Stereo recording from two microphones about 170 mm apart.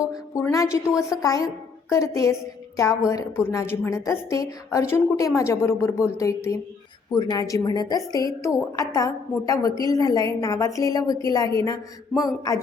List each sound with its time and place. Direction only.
0.5 s a woman's voice: 20° left (ahead or behind)